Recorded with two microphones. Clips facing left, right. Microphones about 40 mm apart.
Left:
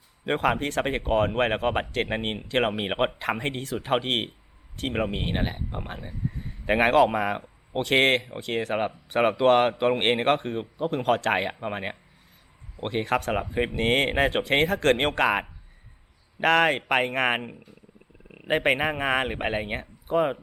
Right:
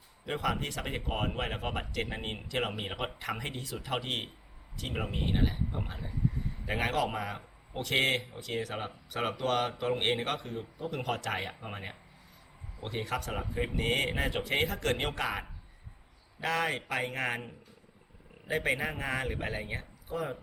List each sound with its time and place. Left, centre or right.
0.3 s speech: left